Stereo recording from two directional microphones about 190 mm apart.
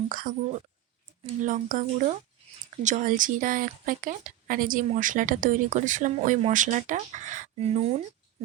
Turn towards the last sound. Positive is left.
turn(degrees=-30)  # may be behind; listen again after turning